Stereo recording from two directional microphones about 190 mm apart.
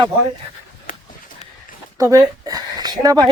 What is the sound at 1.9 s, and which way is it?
Speech, 15° right (ahead or behind).